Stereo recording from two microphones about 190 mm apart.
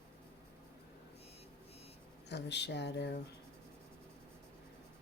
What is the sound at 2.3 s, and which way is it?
Speech, 65° left (ahead or behind).